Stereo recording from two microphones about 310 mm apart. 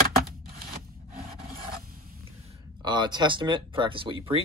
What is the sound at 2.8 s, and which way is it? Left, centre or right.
Speech, centre.